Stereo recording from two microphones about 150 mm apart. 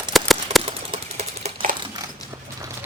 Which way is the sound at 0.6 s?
40° right (ahead or behind).